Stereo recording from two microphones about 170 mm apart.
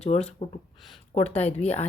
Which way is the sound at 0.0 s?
35° left (ahead or behind).